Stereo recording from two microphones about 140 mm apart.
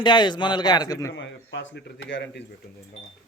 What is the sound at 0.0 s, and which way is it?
A man's voice, 35° left (ahead or behind).